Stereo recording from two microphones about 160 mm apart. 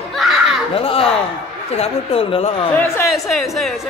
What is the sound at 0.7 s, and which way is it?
Speech, 35° left (ahead or behind).